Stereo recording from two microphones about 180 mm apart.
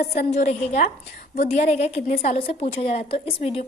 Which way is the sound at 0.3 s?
40° left (ahead or behind).